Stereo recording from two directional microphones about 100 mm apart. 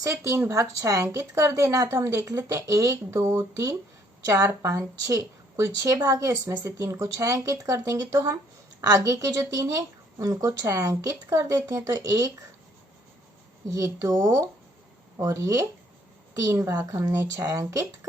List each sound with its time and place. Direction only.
0.0 s a woman's voice: 30° right (ahead or behind)
13.7 s a woman's voice: 35° right (ahead or behind)